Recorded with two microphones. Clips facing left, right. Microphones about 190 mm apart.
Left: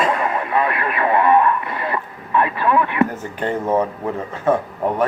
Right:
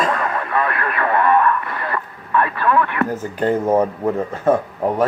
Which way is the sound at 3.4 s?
40° right (ahead or behind).